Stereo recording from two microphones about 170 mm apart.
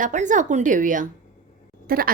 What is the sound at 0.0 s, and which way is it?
A woman's voice, 45° right (ahead or behind).